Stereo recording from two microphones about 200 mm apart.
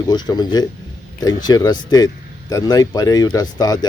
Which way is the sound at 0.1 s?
20° left (ahead or behind).